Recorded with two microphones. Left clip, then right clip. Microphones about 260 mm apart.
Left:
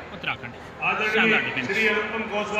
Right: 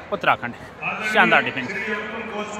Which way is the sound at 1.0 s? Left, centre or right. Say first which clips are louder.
Right 6 dB; centre.